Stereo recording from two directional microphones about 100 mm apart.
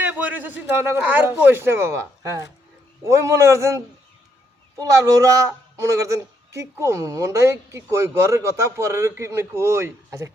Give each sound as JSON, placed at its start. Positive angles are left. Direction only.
{"t": 0.0, "sound": "speech", "side_deg": -15}